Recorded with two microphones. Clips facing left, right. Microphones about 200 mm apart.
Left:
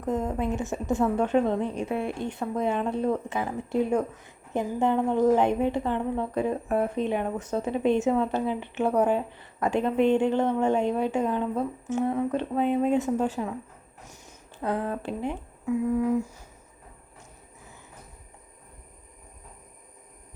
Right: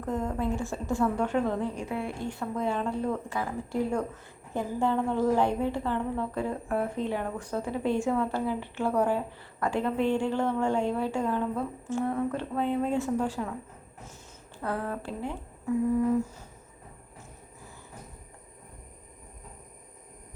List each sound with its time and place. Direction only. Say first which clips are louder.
0.0 s a woman's voice: left 2 dB; 20° left (ahead or behind)
14.6 s a woman's voice: left 4 dB; 20° left (ahead or behind)